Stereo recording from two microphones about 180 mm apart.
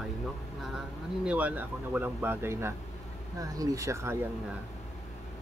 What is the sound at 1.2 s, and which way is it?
Speech, 5° right (ahead or behind).